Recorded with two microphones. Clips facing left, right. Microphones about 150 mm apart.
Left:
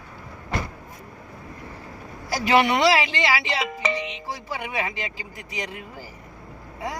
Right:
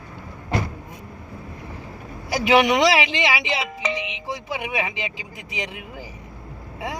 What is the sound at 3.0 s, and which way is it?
Music, 15° right (ahead or behind).